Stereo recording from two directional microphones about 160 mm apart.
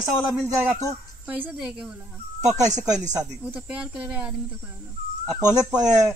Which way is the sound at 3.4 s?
5° right (ahead or behind).